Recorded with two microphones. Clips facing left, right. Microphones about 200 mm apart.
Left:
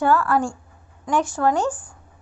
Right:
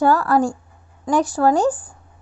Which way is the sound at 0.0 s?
40° right (ahead or behind).